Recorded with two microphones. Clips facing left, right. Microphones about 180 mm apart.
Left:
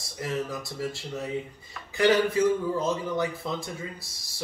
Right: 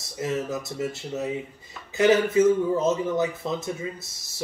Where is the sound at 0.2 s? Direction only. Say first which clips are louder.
Right 3 dB; 20° right (ahead or behind).